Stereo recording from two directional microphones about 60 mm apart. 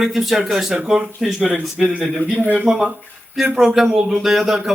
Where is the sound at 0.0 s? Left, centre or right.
Centre.